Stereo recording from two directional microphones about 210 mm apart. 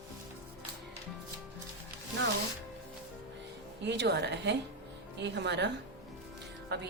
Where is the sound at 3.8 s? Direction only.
55° right (ahead or behind).